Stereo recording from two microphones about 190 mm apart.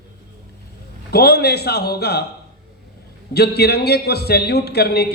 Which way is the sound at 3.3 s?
55° left (ahead or behind).